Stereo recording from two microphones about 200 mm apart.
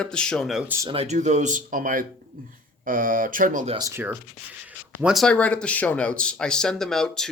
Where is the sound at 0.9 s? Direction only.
30° right (ahead or behind).